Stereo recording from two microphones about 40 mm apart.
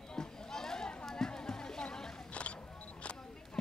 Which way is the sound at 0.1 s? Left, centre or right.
Centre.